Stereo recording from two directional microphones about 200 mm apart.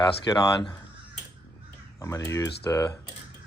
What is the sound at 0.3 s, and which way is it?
Speech, 20° left (ahead or behind).